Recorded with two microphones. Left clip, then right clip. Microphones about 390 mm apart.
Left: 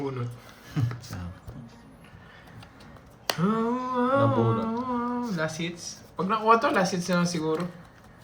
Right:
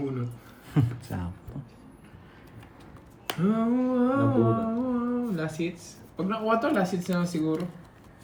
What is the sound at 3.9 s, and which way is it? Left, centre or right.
Humming, centre.